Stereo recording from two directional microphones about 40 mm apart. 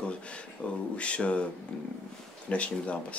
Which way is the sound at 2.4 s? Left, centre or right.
Left.